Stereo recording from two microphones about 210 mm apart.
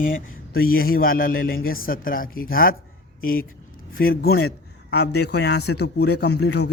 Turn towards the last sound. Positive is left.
turn(degrees=55)  # may be behind; listen again after turning